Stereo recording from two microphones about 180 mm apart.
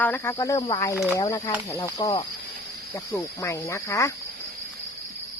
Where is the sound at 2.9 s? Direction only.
15° left (ahead or behind).